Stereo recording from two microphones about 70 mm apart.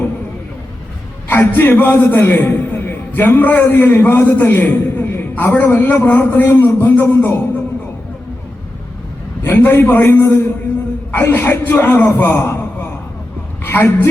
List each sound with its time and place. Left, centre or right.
1.3 s a man's voice: left
9.6 s a man's voice: left
13.7 s a man's voice: left